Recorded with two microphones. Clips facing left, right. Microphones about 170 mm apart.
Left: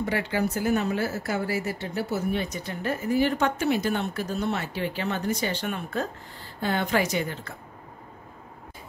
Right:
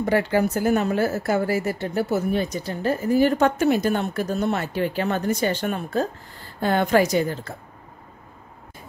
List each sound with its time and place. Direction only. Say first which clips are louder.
0.0 s speech: right 6 dB; 45° right (ahead or behind)
6.6 s a woman's voice: right 6 dB; 50° right (ahead or behind)